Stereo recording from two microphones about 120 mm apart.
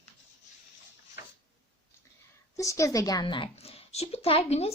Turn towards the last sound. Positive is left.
turn(degrees=60)  # may be behind; listen again after turning